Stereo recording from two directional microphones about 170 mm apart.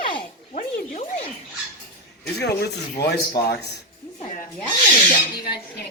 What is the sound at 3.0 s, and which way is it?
Speech, 70° left (ahead or behind).